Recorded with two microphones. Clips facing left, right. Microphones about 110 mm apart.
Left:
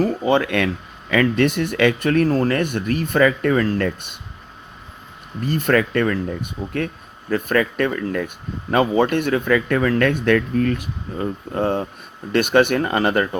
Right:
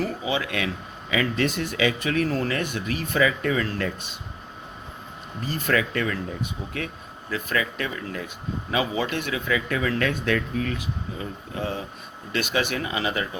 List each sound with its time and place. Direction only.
0.0 s speech: 55° left (ahead or behind)
5.4 s speech: 55° left (ahead or behind)